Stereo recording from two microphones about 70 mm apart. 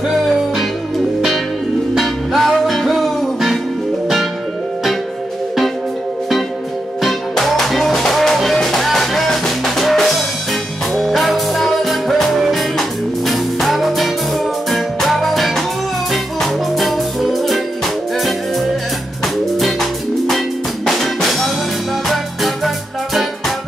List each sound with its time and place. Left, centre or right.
2.0 s music: centre
7.0 s music: centre